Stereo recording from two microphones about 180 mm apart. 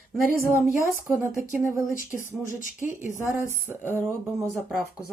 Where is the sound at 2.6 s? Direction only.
45° left (ahead or behind).